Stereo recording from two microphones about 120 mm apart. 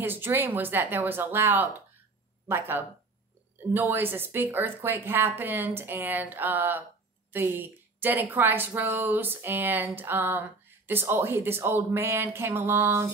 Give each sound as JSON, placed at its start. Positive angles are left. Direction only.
{"t": 0.0, "sound": "speech", "side_deg": -20}